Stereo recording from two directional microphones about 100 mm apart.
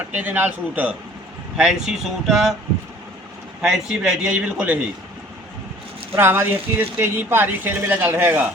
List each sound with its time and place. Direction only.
0.1 s a man's voice: 20° right (ahead or behind); by 2.6 s centre (ahead or behind)
3.6 s a man's voice: 5° right (ahead or behind)
6.1 s speech: 20° right (ahead or behind)